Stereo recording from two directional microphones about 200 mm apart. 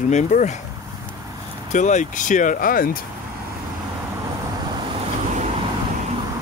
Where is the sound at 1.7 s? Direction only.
35° left (ahead or behind).